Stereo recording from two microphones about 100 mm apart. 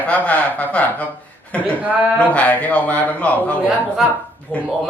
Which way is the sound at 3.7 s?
10° right (ahead or behind).